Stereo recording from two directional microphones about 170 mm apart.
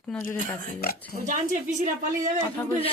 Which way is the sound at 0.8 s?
65° left (ahead or behind).